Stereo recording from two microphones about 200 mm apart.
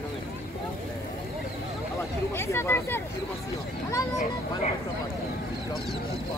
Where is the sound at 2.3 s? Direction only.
10° left (ahead or behind).